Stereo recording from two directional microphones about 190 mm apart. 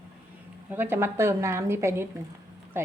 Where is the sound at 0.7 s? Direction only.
10° right (ahead or behind).